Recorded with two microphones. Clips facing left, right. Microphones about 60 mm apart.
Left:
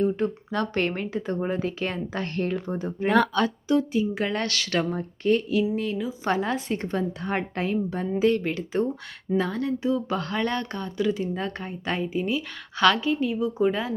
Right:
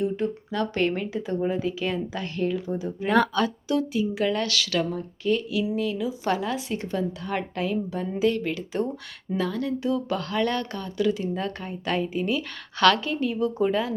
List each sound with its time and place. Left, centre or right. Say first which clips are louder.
0.0 s speech: left 2 dB; left
3.1 s speech: even; centre
3.7 s a woman's voice: left 2 dB; left